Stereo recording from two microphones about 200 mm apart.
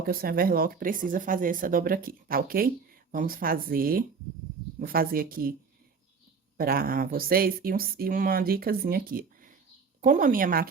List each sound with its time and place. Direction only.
0.0 s speech: 45° right (ahead or behind)
6.6 s speech: 45° right (ahead or behind)